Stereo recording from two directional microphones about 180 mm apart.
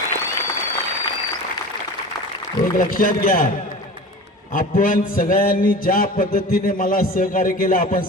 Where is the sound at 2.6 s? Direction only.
50° left (ahead or behind).